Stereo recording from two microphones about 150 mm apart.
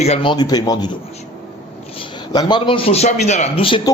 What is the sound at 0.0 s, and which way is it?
Speech, 40° left (ahead or behind).